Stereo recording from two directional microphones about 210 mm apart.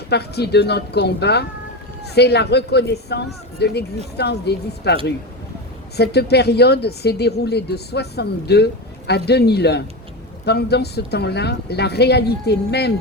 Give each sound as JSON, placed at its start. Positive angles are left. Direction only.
{"t": 0.1, "sound": "a woman's voice", "side_deg": 50}
{"t": 6.0, "sound": "a woman's voice", "side_deg": 50}